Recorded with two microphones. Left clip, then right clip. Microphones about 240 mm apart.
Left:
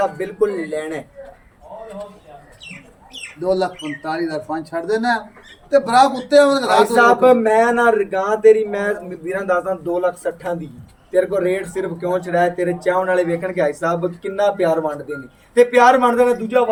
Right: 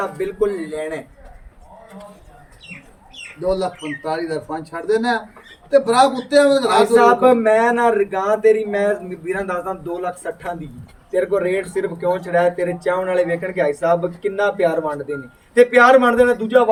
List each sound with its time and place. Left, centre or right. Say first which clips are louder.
0.2 s a man's voice: left 1 dB; centre
3.5 s a man's voice: left 3 dB; centre